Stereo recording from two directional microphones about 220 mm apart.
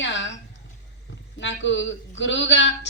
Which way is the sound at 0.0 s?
55° left (ahead or behind).